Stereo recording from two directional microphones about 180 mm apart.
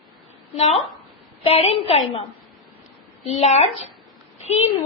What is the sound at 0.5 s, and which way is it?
A woman's voice, 40° left (ahead or behind).